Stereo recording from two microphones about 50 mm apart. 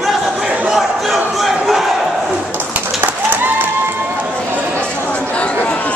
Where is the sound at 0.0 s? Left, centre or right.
Centre.